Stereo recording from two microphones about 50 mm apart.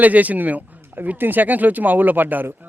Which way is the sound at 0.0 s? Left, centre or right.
Right.